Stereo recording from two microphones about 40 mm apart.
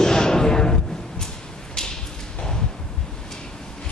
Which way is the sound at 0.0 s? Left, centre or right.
Centre.